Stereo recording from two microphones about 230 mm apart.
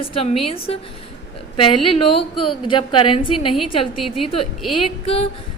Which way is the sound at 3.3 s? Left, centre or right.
Left.